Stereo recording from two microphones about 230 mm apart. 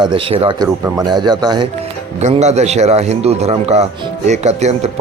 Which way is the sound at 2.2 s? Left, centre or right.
Right.